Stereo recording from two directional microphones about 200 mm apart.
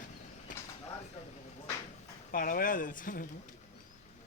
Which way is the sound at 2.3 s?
45° left (ahead or behind).